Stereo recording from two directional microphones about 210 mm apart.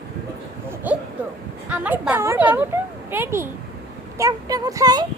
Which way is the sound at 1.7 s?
5° right (ahead or behind).